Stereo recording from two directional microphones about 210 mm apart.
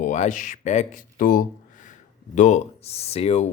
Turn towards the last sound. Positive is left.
turn(degrees=30)  # may be behind; listen again after turning